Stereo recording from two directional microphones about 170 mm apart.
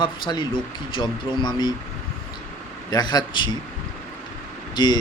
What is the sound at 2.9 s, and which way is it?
Speech, 25° left (ahead or behind).